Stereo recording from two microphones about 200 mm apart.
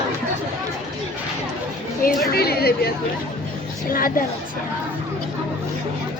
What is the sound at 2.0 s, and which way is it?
Chatter, 50° left (ahead or behind).